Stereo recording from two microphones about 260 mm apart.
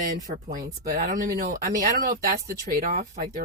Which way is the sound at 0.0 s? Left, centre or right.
Right.